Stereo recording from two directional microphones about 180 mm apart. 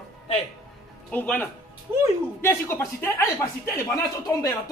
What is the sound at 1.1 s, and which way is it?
Speech, 10° left (ahead or behind).